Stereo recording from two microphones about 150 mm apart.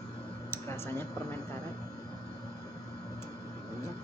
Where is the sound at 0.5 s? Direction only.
15° left (ahead or behind).